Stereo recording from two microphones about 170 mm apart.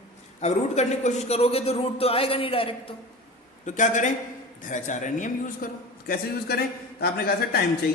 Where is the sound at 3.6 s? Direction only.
45° left (ahead or behind).